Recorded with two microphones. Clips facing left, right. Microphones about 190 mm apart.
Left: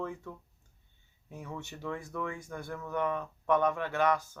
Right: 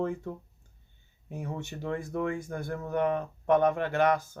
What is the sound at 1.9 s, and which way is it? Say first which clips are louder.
Speech: right 7 dB; 45° right (ahead or behind).